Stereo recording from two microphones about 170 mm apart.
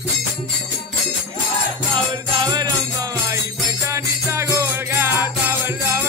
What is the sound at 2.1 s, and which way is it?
Jingle bell, 25° right (ahead or behind).